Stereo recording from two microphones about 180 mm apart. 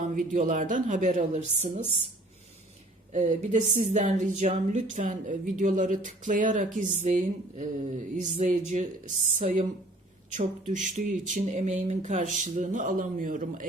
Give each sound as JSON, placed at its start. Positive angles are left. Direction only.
{"t": 0.0, "sound": "speech", "side_deg": -45}
{"t": 3.1, "sound": "a woman's voice", "side_deg": -40}